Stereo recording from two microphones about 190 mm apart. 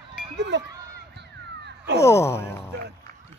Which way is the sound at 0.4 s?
65° right (ahead or behind).